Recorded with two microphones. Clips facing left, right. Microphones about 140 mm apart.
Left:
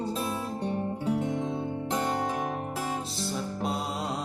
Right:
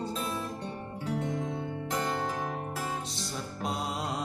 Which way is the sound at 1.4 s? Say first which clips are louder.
Left 4 dB; 20° left (ahead or behind).